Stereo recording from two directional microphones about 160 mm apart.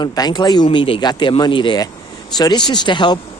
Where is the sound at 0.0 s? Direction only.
25° left (ahead or behind).